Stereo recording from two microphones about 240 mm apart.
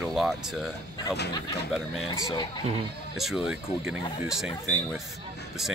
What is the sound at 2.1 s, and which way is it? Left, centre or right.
Speech, centre.